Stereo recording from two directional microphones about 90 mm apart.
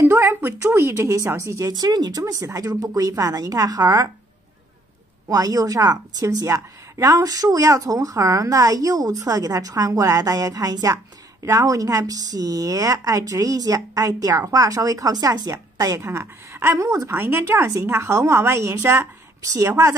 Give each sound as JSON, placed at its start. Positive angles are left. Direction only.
{"t": 0.0, "sound": "a woman's voice", "side_deg": -30}
{"t": 1.7, "sound": "a woman's voice", "side_deg": -50}
{"t": 5.3, "sound": "a woman's voice", "side_deg": -40}